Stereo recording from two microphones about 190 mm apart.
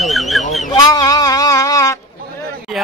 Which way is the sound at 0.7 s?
20° left (ahead or behind).